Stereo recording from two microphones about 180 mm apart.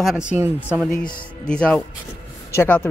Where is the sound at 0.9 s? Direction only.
5° left (ahead or behind).